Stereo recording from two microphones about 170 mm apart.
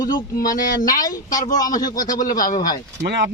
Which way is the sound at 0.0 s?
55° left (ahead or behind).